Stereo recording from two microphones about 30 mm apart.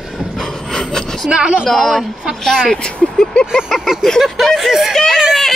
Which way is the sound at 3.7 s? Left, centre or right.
Centre.